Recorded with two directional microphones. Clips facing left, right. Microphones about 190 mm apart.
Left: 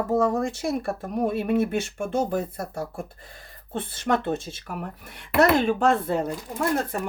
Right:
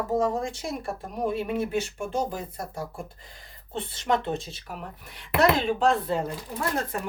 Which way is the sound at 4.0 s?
55° left (ahead or behind).